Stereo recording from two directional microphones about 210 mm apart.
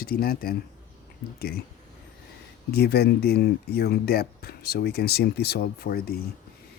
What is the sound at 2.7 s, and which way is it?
Speech, 50° left (ahead or behind).